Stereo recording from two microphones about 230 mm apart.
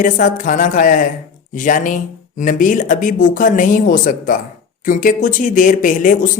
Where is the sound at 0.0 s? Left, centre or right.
Left.